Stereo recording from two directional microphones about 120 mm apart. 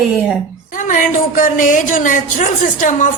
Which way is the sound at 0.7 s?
90° left.